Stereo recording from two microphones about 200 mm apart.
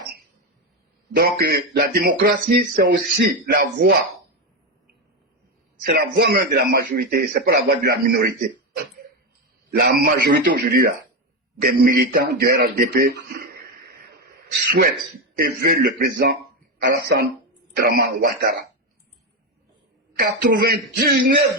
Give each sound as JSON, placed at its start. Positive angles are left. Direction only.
{"t": 1.1, "sound": "speech", "side_deg": -50}
{"t": 5.8, "sound": "a man's voice", "side_deg": -55}
{"t": 20.1, "sound": "speech", "side_deg": -50}